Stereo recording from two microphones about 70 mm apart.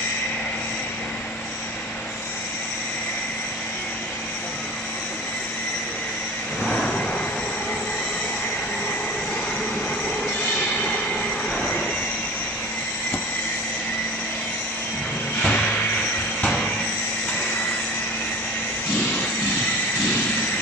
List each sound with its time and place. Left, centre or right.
6.8 s vehicle: centre
11.5 s vehicle: centre
15.4 s vehicle: centre
16.3 s train: centre